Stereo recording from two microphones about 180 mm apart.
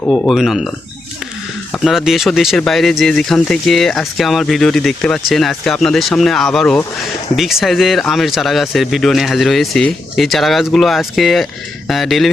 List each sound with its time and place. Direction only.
0.0 s speech: 5° left (ahead or behind)
1.8 s speech: centre (ahead or behind)